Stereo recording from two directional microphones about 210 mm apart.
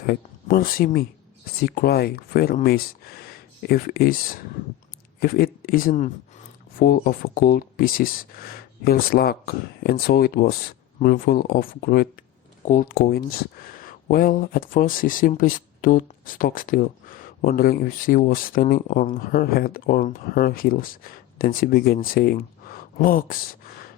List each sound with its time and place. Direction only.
0.0 s speech: 45° left (ahead or behind)
12.9 s speech: 50° left (ahead or behind)